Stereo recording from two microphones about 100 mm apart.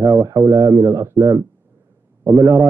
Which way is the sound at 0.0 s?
35° right (ahead or behind).